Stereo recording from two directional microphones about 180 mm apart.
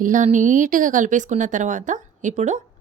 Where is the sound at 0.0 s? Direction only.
45° right (ahead or behind).